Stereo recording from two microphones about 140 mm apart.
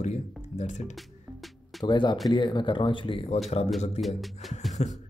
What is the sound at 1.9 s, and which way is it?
Speech, 35° left (ahead or behind).